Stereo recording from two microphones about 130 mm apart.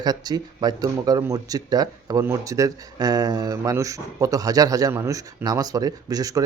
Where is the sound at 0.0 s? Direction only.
30° right (ahead or behind).